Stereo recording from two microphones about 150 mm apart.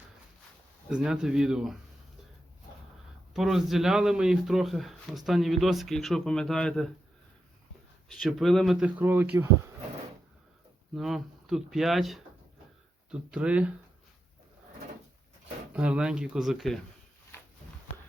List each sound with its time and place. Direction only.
0.9 s speech: 5° right (ahead or behind)
3.3 s speech: centre (ahead or behind)
8.2 s speech: centre (ahead or behind)
10.9 s speech: centre (ahead or behind)
15.7 s speech: 10° right (ahead or behind)
17.3 s a sound: 15° left (ahead or behind)